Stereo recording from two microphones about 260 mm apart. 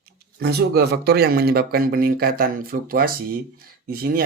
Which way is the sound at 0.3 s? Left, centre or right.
Right.